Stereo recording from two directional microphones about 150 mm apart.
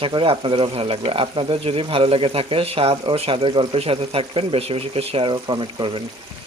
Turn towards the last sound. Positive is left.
turn(degrees=-35)  # may be behind; listen again after turning